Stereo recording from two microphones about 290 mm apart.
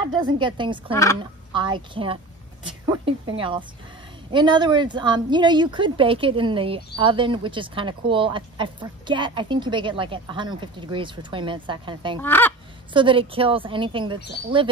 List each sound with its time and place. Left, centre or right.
0.4 s speech: centre
12.2 s speech: centre
12.9 s speech: centre